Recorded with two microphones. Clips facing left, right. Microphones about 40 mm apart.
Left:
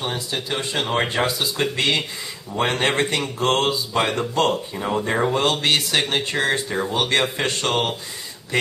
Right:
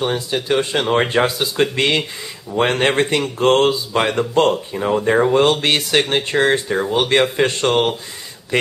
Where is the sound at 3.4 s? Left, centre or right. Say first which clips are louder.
Right 6 dB; right.